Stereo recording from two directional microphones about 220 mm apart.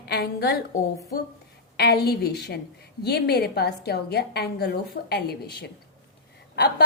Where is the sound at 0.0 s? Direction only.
45° left (ahead or behind).